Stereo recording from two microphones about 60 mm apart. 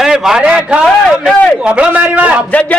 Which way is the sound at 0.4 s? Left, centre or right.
Centre.